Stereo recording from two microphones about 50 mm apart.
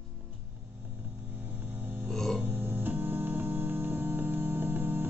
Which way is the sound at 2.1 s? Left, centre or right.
Centre.